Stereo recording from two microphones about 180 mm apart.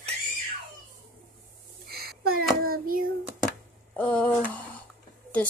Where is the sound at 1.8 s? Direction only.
60° right (ahead or behind).